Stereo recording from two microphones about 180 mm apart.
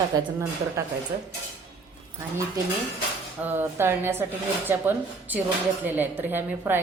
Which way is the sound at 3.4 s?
15° right (ahead or behind).